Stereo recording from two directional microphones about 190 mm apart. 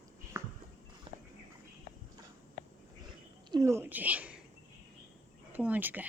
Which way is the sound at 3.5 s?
15° right (ahead or behind).